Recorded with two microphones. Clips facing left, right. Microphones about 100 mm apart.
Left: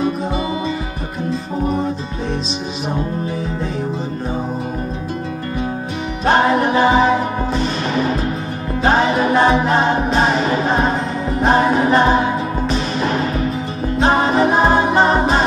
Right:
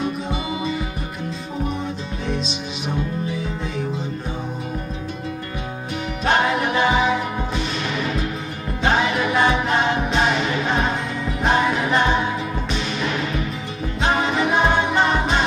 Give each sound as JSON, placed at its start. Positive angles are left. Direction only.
{"t": 6.2, "sound": "music", "side_deg": 35}
{"t": 14.0, "sound": "a capella", "side_deg": 35}